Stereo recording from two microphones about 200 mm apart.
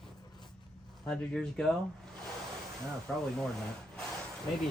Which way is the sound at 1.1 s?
5° left (ahead or behind).